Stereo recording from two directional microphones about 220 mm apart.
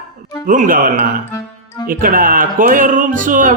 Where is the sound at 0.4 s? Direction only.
35° right (ahead or behind).